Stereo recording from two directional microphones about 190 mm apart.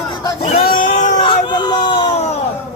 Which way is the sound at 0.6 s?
45° left (ahead or behind).